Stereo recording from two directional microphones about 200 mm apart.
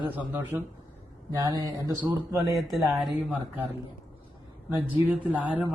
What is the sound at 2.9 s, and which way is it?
Speech, centre (ahead or behind).